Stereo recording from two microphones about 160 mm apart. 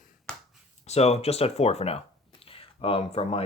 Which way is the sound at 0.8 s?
40° left (ahead or behind).